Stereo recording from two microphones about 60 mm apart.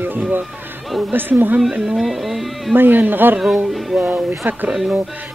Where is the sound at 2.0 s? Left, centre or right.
Centre.